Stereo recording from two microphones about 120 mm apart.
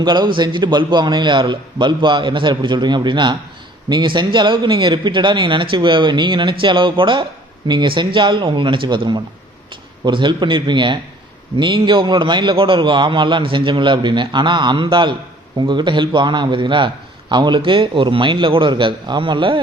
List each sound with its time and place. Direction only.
0.0 s a man's voice: 35° right (ahead or behind)